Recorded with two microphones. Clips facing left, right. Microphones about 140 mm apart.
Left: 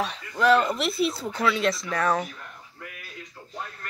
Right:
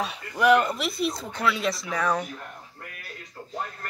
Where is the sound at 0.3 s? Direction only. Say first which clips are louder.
Right 1 dB; 15° right (ahead or behind).